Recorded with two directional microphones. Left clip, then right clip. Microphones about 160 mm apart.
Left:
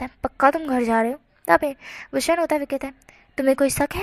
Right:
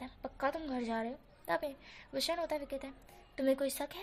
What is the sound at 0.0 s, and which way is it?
A woman's voice, 45° left (ahead or behind).